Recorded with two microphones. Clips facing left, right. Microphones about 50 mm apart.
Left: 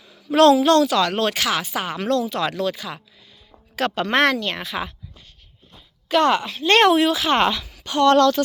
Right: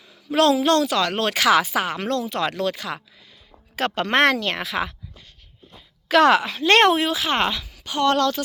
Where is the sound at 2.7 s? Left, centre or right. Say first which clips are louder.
Right 2 dB; right.